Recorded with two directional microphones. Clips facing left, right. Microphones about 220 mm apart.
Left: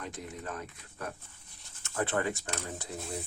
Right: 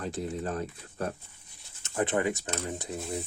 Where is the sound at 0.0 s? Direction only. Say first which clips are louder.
Right 8 dB; 35° right (ahead or behind).